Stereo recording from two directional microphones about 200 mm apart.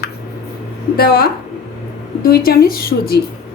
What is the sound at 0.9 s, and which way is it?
A woman's voice, 50° left (ahead or behind).